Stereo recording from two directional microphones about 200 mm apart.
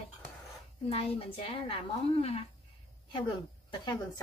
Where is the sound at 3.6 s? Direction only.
20° left (ahead or behind).